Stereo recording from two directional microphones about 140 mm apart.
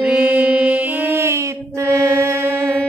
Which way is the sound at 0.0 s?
10° right (ahead or behind).